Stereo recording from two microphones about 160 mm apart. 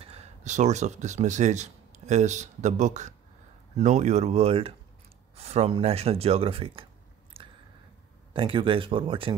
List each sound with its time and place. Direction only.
0.0 s speech: 40° right (ahead or behind)
7.3 s a sound: 35° right (ahead or behind)
8.3 s speech: 30° right (ahead or behind)